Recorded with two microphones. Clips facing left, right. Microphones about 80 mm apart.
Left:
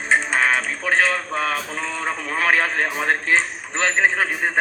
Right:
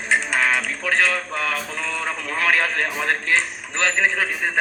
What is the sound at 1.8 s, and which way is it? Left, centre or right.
A man's voice, left.